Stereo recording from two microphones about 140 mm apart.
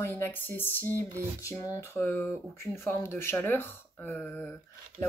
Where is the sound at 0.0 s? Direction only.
15° left (ahead or behind).